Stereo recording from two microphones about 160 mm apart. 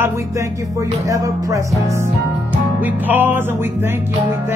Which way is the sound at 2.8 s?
10° right (ahead or behind).